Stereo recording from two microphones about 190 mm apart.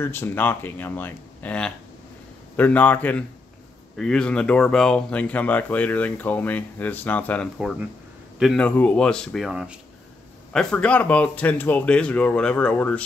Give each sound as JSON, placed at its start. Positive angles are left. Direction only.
{"t": 0.0, "sound": "speech", "side_deg": 10}